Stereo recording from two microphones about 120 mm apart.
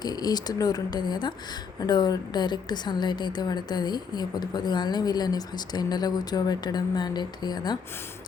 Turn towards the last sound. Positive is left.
turn(degrees=35)  # may be behind; listen again after turning